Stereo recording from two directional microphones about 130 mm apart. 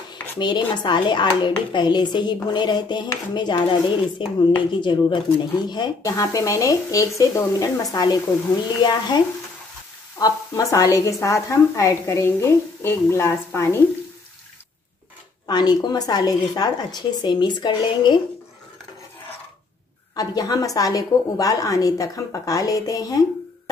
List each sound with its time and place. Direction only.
0.4 s a woman's voice: 35° left (ahead or behind); by 13.7 s 20° left (ahead or behind)
15.4 s speech: 30° left (ahead or behind)
20.2 s a woman's voice: 30° left (ahead or behind)